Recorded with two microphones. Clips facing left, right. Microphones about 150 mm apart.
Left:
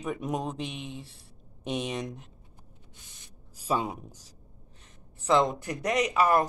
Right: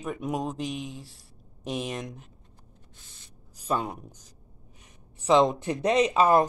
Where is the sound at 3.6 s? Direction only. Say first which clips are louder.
Even; 5° left (ahead or behind).